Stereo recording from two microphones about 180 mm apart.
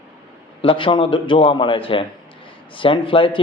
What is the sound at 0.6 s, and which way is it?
A man's voice, 30° left (ahead or behind).